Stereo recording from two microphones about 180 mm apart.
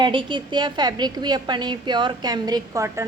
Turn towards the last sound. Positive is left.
turn(degrees=-15)  # may be behind; listen again after turning